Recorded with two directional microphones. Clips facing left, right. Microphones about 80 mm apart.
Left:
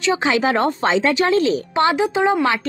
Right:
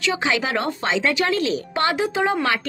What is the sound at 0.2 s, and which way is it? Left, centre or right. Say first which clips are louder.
Speech: left 5 dB; left.